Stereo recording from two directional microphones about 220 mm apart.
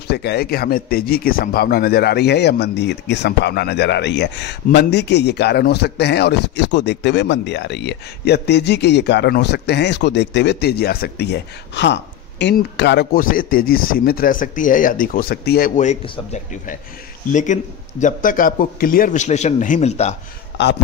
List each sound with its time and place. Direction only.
0.1 s speech: 50° left (ahead or behind)
15.7 s speech: 30° left (ahead or behind)